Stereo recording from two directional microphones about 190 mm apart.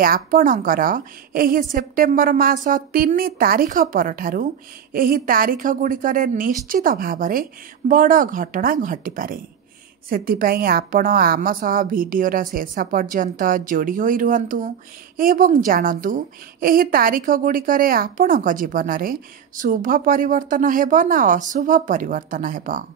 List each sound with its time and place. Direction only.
0.0 s a woman's voice: 50° right (ahead or behind)